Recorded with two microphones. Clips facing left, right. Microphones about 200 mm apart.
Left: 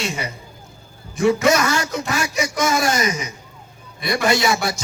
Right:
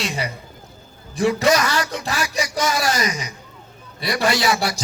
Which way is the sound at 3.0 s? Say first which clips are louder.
Left 2 dB; 25° left (ahead or behind).